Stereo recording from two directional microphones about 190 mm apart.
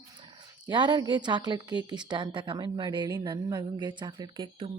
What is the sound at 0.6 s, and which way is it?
A woman's voice, 25° right (ahead or behind).